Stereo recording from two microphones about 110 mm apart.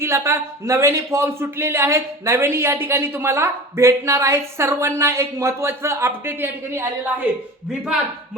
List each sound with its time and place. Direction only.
0.0 s a man's voice: 25° right (ahead or behind)